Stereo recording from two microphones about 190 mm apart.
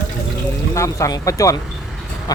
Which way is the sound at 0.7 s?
15° left (ahead or behind).